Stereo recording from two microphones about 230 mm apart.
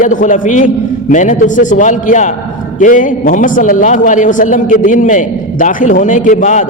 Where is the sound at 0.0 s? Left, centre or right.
Left.